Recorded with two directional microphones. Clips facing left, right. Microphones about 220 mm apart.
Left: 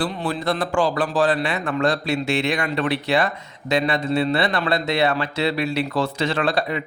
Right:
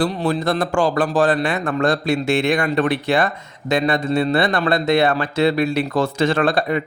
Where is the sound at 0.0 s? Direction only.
40° right (ahead or behind).